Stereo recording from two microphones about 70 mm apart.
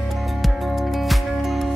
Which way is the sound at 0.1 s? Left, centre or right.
Centre.